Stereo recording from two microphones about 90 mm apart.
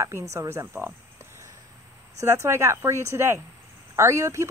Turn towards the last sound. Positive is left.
turn(degrees=-30)  # may be behind; listen again after turning